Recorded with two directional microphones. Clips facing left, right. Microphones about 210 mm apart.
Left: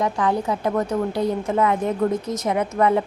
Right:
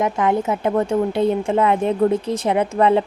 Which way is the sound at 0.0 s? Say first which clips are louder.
Right 3 dB; 20° right (ahead or behind).